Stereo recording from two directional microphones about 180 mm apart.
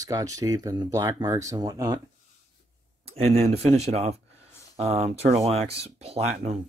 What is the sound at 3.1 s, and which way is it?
Speech, 35° right (ahead or behind).